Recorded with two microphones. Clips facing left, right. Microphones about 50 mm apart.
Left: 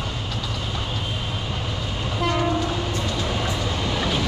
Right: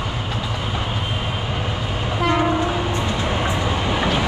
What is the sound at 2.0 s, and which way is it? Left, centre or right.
Train, right.